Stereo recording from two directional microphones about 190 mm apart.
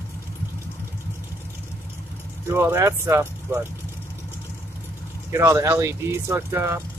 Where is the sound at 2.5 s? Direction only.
15° right (ahead or behind).